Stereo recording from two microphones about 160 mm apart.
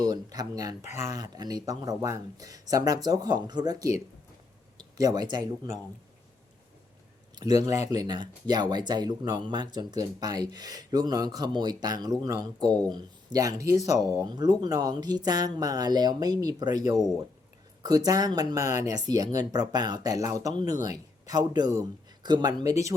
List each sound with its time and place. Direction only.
0.0 s speech: 25° right (ahead or behind)
7.3 s speech: 20° right (ahead or behind)